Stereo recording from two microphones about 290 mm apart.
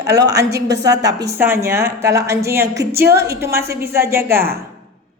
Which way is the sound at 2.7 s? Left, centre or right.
Right.